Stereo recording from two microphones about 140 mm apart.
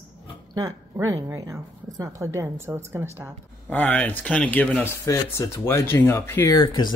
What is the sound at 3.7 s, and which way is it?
Speech, 10° left (ahead or behind).